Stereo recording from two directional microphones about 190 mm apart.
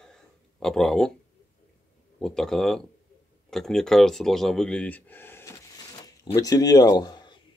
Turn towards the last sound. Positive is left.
turn(degrees=25)  # may be behind; listen again after turning